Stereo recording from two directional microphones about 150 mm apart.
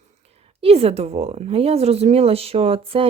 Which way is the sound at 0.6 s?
40° right (ahead or behind).